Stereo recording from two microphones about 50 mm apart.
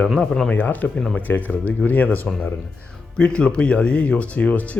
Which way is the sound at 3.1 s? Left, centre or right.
Left.